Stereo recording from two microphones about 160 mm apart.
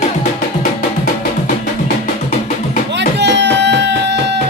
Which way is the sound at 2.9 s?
90° right.